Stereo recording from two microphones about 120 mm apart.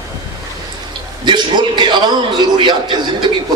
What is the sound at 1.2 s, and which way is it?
A man's voice, 40° right (ahead or behind).